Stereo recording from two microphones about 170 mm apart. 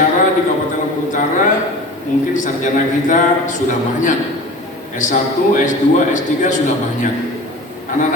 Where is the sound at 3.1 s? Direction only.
45° left (ahead or behind).